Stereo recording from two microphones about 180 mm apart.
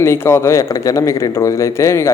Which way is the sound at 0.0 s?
15° left (ahead or behind).